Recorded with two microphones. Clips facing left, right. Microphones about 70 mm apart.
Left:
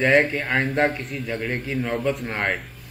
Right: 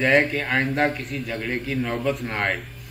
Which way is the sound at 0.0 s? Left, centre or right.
Centre.